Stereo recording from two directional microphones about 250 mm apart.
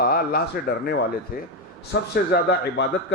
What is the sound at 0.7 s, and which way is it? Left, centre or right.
Speech, left.